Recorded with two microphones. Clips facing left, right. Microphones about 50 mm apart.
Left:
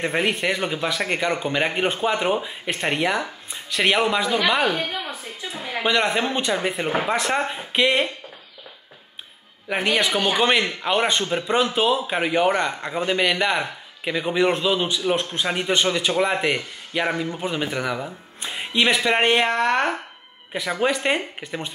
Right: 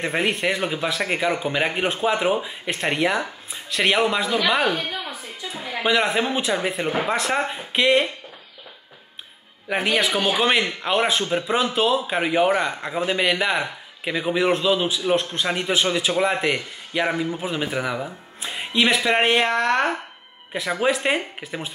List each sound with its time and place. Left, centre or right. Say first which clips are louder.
0.0 s speech: even; centre
4.7 s a sound: left 1 dB; left
5.5 s speech: right 1 dB; centre
9.7 s speech: even; centre